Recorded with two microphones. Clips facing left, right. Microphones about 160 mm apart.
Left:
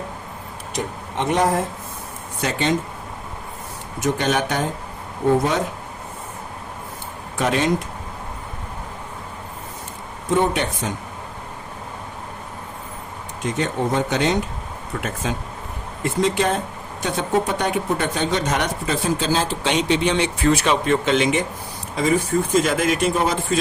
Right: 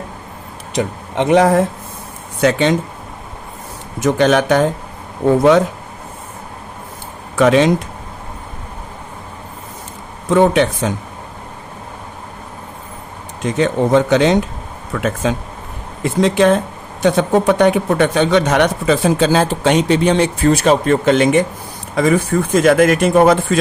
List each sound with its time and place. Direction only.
0.7 s speech: 90° right
4.0 s speech: 90° right
7.3 s speech: 90° right
10.2 s speech: 90° right
13.4 s speech: 90° right; by 21.4 s 50° right (ahead or behind)
21.9 s speech: 60° right (ahead or behind)